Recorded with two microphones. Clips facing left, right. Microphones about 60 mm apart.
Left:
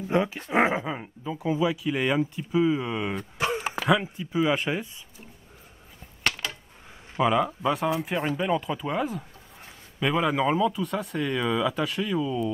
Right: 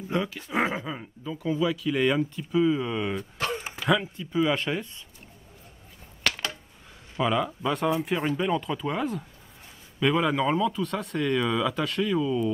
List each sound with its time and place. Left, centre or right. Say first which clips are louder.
0.1 s speech: left 4 dB; left
3.3 s a sound: left 6 dB; centre
3.9 s speech: even; centre
7.2 s speech: left 3 dB; centre